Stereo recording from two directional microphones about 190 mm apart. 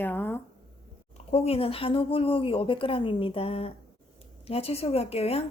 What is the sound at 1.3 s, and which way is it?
A woman's voice, 30° left (ahead or behind).